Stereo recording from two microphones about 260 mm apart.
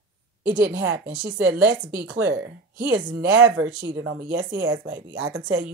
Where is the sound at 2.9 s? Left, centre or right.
Right.